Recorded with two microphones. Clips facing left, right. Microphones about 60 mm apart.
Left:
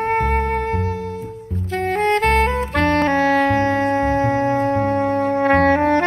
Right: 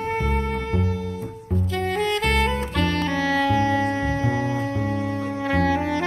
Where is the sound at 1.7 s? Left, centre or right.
Left.